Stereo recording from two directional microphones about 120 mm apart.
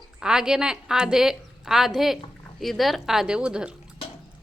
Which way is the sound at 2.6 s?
Centre (ahead or behind).